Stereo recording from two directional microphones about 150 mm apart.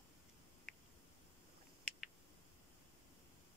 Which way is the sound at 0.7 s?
Centre (ahead or behind).